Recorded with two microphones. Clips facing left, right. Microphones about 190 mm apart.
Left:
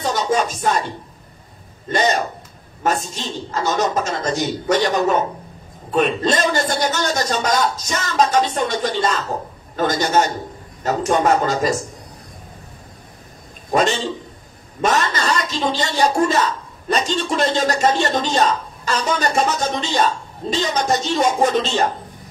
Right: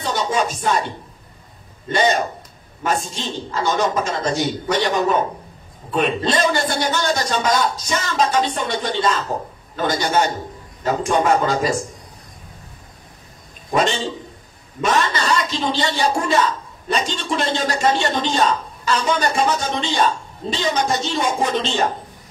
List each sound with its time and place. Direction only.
0.0 s music: 45° left (ahead or behind)
1.9 s a man's voice: 45° left (ahead or behind)
2.8 s a sound: 45° left (ahead or behind)
3.5 s a man's voice: 45° left (ahead or behind)
13.7 s speech: 45° left (ahead or behind)
14.8 s a sound: 45° left (ahead or behind)
16.9 s a man's voice: 45° left (ahead or behind)